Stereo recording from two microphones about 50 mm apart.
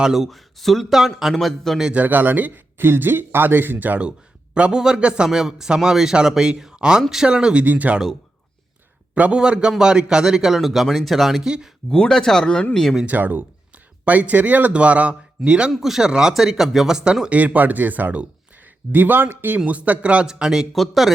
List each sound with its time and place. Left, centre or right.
0.0 s speech: centre
1.9 s a man's voice: right
4.5 s a man's voice: right
7.6 s a man's voice: right
9.3 s a man's voice: centre
11.4 s a man's voice: centre
11.9 s speech: centre
13.1 s speech: right
15.7 s a man's voice: centre
17.2 s a man's voice: right
19.5 s speech: right
20.2 s a man's voice: centre
20.7 s speech: centre